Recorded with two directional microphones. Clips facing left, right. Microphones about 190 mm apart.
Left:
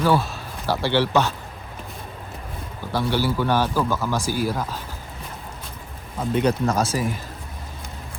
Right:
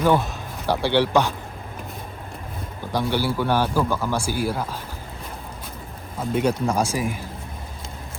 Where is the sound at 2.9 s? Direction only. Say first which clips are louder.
Even; 15° right (ahead or behind).